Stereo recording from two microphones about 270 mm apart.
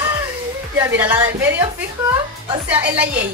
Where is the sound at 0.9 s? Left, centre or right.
Centre.